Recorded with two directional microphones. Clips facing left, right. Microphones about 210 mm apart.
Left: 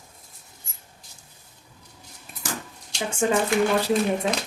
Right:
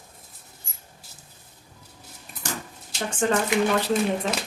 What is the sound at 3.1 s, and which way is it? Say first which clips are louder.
Speech: left 1 dB; 10° left (ahead or behind).